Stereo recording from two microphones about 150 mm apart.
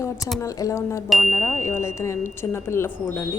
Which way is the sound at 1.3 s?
15° left (ahead or behind).